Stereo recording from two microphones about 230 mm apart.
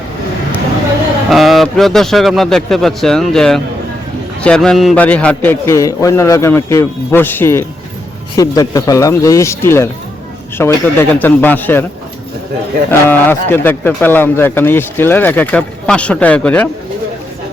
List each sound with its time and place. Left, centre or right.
1.3 s a man's voice: centre
13.1 s speech: centre